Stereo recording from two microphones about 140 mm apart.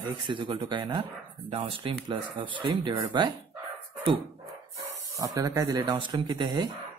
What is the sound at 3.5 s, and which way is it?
Dog, 25° right (ahead or behind).